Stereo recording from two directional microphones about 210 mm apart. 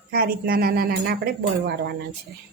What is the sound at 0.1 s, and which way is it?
Speech, 45° right (ahead or behind).